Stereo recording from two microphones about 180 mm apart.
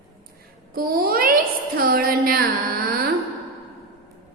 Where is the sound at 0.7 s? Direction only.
55° right (ahead or behind).